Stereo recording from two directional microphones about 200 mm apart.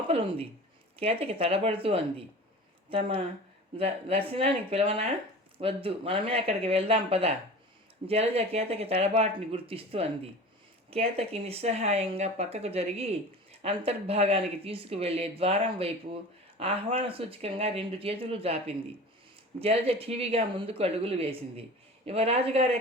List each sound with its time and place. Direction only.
0.1 s speech: 30° right (ahead or behind)
3.8 s speech: 30° right (ahead or behind)